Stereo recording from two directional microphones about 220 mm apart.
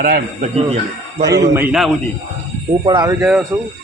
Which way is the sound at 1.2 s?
15° right (ahead or behind).